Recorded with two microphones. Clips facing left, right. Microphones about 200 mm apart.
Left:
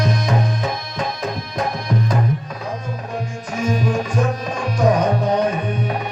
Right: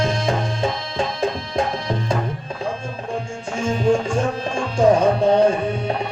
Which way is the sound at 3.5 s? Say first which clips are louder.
Right 2 dB; 25° right (ahead or behind).